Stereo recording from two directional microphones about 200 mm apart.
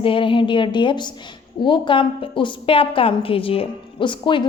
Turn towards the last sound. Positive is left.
turn(degrees=25)  # may be behind; listen again after turning